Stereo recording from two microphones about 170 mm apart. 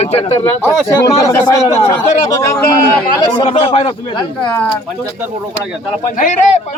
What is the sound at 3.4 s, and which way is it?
Speech, 30° left (ahead or behind).